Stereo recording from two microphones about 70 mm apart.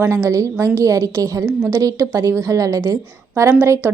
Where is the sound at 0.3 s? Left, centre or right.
Right.